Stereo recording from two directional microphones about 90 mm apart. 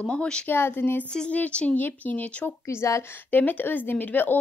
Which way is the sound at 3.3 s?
20° left (ahead or behind).